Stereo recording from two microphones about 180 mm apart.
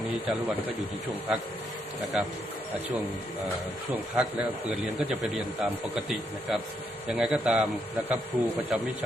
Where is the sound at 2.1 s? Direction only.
5° right (ahead or behind).